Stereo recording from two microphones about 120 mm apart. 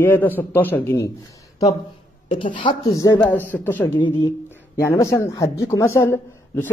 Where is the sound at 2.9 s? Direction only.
30° left (ahead or behind).